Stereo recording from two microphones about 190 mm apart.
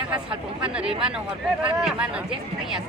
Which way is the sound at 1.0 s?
5° right (ahead or behind).